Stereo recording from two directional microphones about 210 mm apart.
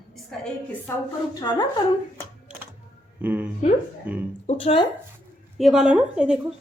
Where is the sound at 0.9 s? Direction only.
10° left (ahead or behind).